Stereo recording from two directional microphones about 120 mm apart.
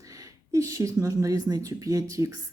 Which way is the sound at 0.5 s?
25° right (ahead or behind).